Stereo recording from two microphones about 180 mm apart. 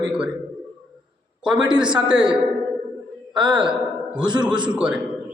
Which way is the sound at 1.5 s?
5° right (ahead or behind).